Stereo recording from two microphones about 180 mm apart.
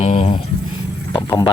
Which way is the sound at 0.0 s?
35° left (ahead or behind).